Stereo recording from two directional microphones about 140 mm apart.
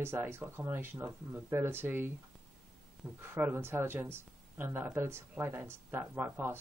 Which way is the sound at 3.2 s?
20° right (ahead or behind).